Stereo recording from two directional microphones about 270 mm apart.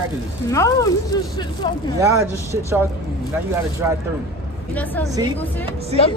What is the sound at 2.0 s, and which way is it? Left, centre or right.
Speech, centre.